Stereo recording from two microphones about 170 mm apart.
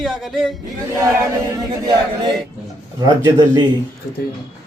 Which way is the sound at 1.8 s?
25° right (ahead or behind).